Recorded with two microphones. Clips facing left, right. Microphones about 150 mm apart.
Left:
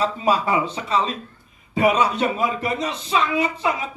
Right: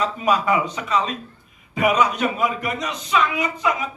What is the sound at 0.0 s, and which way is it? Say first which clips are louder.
A man's voice: even; 30° left (ahead or behind).